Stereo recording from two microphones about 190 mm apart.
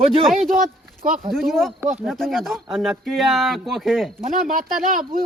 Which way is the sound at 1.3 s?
Centre (ahead or behind).